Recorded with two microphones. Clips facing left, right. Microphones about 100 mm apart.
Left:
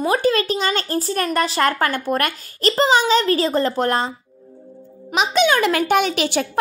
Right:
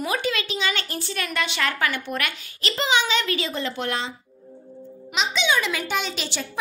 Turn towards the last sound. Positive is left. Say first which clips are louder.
# left 10 dB
turn(degrees=60)  # may be behind; listen again after turning